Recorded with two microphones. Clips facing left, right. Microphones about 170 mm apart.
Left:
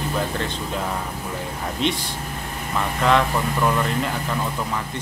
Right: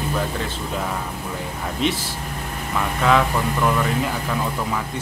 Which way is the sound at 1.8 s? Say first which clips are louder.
Right 1 dB; 5° right (ahead or behind).